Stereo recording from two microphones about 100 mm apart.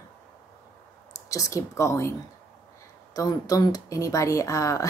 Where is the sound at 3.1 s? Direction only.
35° left (ahead or behind).